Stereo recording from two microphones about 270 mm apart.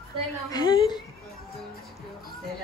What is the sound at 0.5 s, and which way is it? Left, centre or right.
Speech, centre.